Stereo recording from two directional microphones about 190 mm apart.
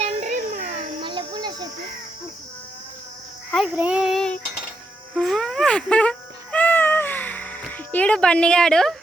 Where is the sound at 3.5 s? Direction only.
Centre (ahead or behind).